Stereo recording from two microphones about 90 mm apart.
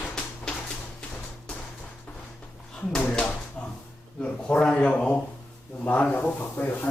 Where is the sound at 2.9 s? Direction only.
15° left (ahead or behind).